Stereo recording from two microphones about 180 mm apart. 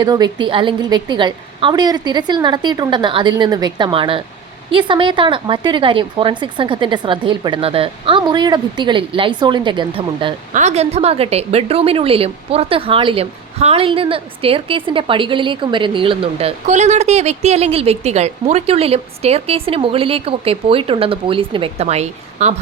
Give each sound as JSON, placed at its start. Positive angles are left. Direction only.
{"t": 0.0, "sound": "a woman's voice", "side_deg": -25}
{"t": 10.5, "sound": "a woman's voice", "side_deg": -40}